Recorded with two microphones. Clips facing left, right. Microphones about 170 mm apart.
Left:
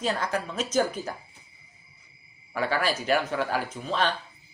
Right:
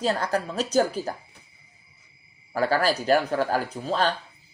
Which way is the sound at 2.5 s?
40° right (ahead or behind).